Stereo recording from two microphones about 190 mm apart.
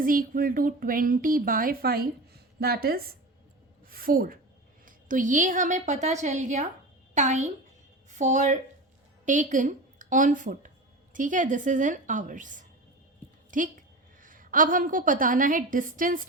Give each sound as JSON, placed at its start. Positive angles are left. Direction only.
{"t": 0.0, "sound": "a woman's voice", "side_deg": -45}